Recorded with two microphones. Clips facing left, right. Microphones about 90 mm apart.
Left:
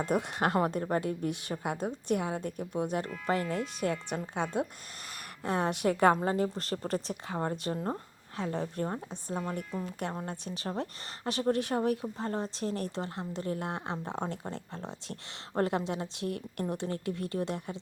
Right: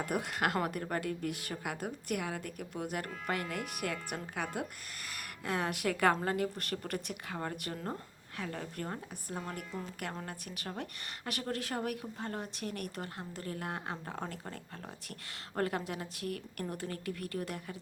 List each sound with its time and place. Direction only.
0.0 s a woman's voice: 25° left (ahead or behind)